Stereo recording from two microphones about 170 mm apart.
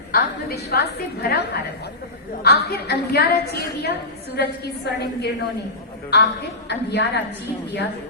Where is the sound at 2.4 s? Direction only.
70° left (ahead or behind).